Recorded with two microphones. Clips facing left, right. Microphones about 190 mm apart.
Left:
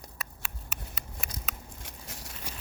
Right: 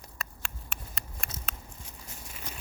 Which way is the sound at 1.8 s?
90° left.